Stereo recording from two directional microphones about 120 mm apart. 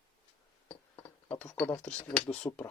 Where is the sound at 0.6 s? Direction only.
10° left (ahead or behind).